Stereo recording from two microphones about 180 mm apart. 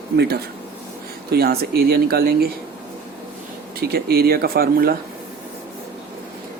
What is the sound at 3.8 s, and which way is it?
Speech, 60° right (ahead or behind).